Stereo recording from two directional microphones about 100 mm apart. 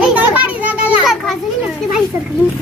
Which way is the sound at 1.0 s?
Centre (ahead or behind).